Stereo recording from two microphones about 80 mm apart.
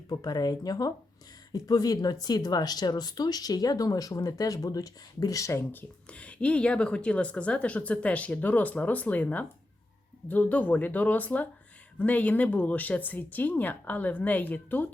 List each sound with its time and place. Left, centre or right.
0.1 s speech: left
5.7 s a woman's voice: centre